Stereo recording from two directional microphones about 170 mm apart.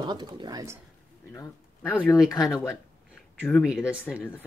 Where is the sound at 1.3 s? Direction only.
15° left (ahead or behind).